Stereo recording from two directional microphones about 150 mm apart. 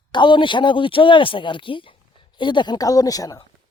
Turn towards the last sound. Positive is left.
turn(degrees=25)  # may be behind; listen again after turning